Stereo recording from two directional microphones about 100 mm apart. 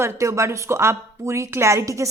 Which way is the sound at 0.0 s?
30° right (ahead or behind).